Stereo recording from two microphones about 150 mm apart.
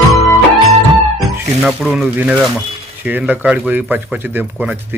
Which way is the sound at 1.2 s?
Centre (ahead or behind).